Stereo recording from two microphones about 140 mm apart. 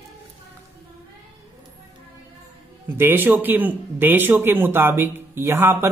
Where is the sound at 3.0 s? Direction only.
15° right (ahead or behind).